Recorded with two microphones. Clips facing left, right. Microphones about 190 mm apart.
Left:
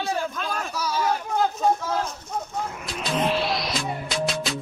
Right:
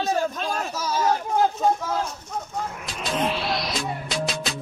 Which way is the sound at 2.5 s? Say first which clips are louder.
Left 1 dB; centre (ahead or behind).